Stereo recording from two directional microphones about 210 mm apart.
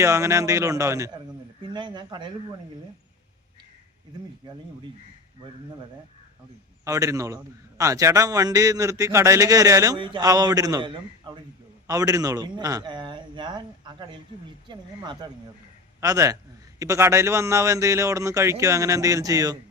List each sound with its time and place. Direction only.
0.0 s a man's voice: 15° right (ahead or behind)
6.8 s a man's voice: 15° right (ahead or behind)